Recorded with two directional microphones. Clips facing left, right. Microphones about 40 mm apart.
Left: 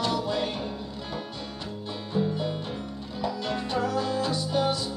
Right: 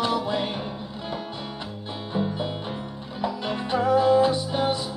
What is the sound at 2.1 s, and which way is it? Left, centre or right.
Music, right.